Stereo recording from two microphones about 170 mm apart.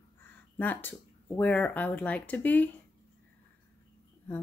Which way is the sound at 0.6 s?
10° left (ahead or behind).